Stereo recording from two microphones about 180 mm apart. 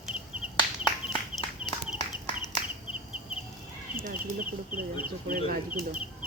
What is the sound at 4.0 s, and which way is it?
Speech, 55° right (ahead or behind).